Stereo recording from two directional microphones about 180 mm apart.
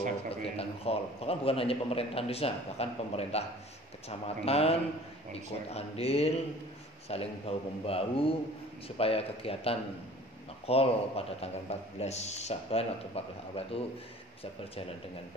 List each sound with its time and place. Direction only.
0.3 s a man's voice: 35° left (ahead or behind)